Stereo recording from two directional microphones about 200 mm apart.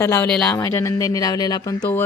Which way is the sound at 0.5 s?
15° left (ahead or behind).